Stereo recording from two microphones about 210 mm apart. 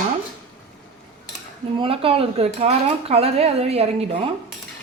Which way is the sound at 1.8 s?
25° right (ahead or behind).